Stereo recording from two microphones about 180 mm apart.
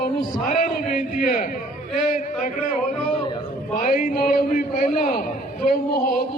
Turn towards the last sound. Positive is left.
turn(degrees=55)  # may be behind; listen again after turning